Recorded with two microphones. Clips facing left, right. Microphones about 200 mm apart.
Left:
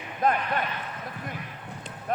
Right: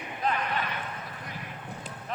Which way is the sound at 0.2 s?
50° left (ahead or behind).